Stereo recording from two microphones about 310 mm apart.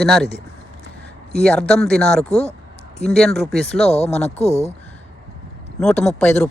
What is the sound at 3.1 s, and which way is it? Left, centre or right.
Speech, centre.